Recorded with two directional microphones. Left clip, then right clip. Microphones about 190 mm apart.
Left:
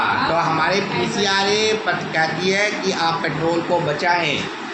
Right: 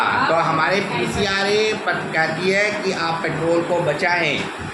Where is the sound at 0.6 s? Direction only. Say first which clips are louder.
Even; 15° left (ahead or behind).